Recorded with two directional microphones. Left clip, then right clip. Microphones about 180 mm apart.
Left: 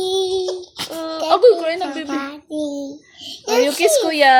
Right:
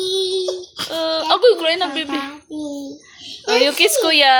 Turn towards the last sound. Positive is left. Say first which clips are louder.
# even
turn(degrees=10)  # may be behind; listen again after turning